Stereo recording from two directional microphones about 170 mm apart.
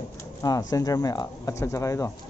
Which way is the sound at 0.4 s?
20° left (ahead or behind).